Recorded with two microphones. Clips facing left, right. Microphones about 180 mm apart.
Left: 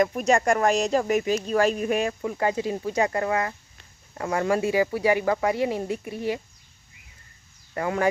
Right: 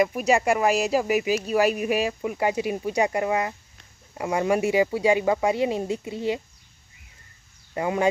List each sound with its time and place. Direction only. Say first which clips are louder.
0.0 s speech: even; 5° right (ahead or behind)
7.7 s speech: right 1 dB; 20° right (ahead or behind)